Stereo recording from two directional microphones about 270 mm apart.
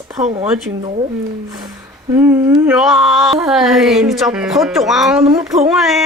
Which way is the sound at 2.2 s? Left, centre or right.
Centre.